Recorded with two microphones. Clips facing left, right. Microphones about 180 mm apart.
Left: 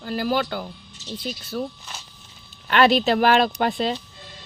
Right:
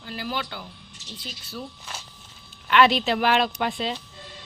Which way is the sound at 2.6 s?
40° left (ahead or behind).